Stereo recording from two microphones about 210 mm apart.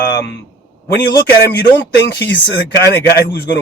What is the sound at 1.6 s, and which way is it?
Speech, 55° left (ahead or behind).